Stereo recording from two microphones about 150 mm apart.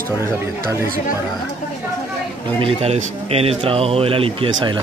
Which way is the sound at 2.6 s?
45° right (ahead or behind).